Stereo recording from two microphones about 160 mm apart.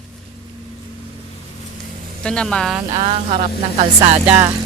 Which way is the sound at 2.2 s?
5° left (ahead or behind).